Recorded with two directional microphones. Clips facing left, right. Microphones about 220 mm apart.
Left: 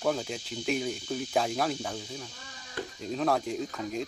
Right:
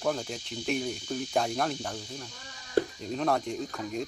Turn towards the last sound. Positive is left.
turn(degrees=0)  # may be behind; listen again after turning